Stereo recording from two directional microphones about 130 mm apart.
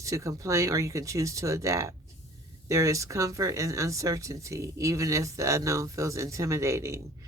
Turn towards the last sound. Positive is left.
turn(degrees=-20)  # may be behind; listen again after turning